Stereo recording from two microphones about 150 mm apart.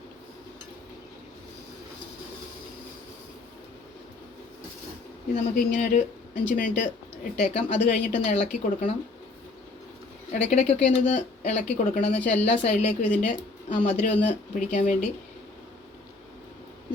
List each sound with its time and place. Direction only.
5.3 s speech: 50° left (ahead or behind)
10.3 s speech: 50° left (ahead or behind)